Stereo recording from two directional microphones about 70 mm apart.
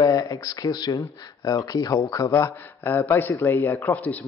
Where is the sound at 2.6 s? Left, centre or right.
Left.